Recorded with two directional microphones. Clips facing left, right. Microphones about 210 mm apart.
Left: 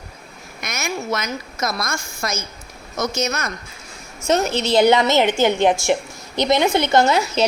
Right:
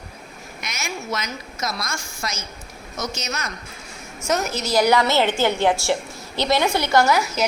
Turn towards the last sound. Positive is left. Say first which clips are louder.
# left 2 dB
turn(degrees=25)  # may be behind; listen again after turning